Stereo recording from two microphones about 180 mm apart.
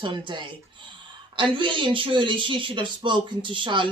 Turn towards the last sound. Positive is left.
turn(degrees=-25)  # may be behind; listen again after turning